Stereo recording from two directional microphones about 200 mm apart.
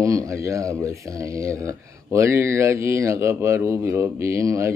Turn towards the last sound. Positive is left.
turn(degrees=-15)  # may be behind; listen again after turning